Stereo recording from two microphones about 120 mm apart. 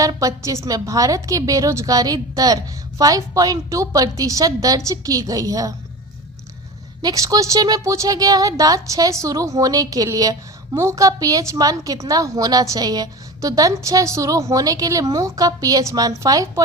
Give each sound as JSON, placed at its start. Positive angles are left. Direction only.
{"t": 0.0, "sound": "a woman's voice", "side_deg": -30}
{"t": 7.0, "sound": "a woman's voice", "side_deg": -30}